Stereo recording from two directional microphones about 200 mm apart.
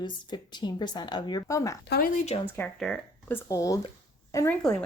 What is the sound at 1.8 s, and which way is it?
Speech, 55° left (ahead or behind).